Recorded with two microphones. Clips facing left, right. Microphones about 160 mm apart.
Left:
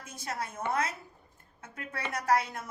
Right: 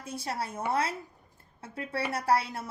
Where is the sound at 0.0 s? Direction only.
35° right (ahead or behind).